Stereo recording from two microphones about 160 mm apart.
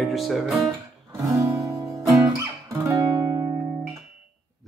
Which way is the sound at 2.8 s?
20° right (ahead or behind).